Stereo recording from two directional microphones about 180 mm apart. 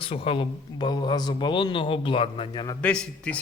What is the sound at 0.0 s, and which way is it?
A man's voice, 30° left (ahead or behind).